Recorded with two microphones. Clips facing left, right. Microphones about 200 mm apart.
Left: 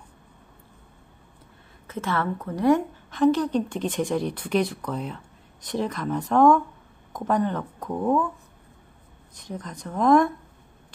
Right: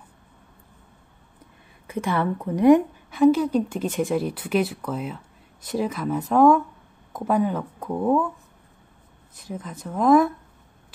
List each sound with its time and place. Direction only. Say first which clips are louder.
1.9 s a woman's voice: right 3 dB; 15° right (ahead or behind)
9.3 s speech: right 1 dB; 5° right (ahead or behind)